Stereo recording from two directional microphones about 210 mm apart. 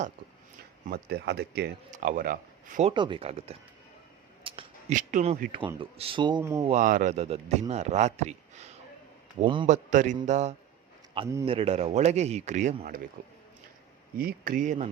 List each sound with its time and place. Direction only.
0.9 s speech: 50° right (ahead or behind)
1.9 s speech: 40° right (ahead or behind)
2.9 s speech: 20° right (ahead or behind)
4.4 s a sound: 25° right (ahead or behind)
4.9 s speech: 35° right (ahead or behind); by 6.7 s 15° right (ahead or behind)
6.7 s a man's voice: 35° right (ahead or behind)